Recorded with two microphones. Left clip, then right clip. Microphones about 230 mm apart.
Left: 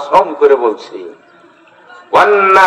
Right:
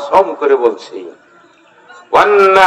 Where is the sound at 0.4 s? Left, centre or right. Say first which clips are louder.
Left 2 dB; right.